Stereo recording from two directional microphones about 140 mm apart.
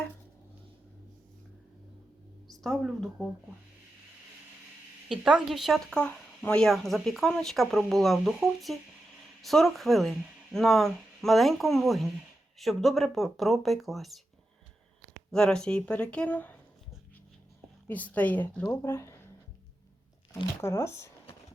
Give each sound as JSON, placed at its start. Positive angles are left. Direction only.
{"t": 2.6, "sound": "speech", "side_deg": 0}
{"t": 5.0, "sound": "speech", "side_deg": -5}
{"t": 15.3, "sound": "speech", "side_deg": 5}
{"t": 17.8, "sound": "speech", "side_deg": 10}
{"t": 18.7, "sound": "speech", "side_deg": 20}
{"t": 20.6, "sound": "speech", "side_deg": 20}